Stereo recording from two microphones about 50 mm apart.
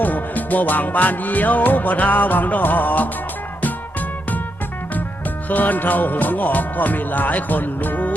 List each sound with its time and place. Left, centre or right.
0.0 s music: left
5.5 s music: left